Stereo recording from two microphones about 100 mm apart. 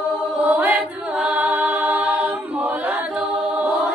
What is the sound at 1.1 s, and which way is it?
A capella, 10° right (ahead or behind).